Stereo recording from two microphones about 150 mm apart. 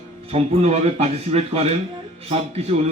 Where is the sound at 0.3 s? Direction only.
45° right (ahead or behind).